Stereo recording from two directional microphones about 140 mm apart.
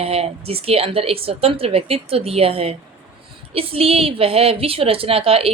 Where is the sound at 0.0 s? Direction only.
45° right (ahead or behind).